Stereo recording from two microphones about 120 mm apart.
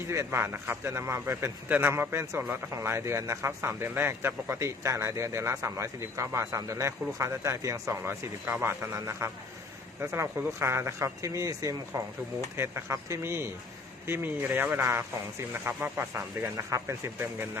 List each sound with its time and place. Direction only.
0.1 s a man's voice: 20° right (ahead or behind)